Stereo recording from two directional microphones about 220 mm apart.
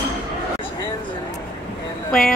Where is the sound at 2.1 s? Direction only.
Centre (ahead or behind).